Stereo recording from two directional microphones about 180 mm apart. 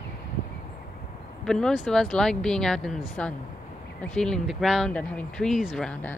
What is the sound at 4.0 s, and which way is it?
Speech, 5° left (ahead or behind).